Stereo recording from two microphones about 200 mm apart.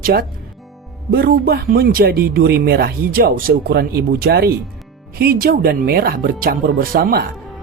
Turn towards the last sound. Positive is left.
turn(degrees=-45)  # may be behind; listen again after turning